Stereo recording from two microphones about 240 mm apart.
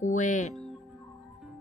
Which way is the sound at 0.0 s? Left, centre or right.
Left.